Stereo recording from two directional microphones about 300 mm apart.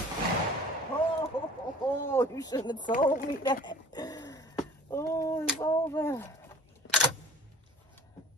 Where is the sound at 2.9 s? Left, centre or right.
Left.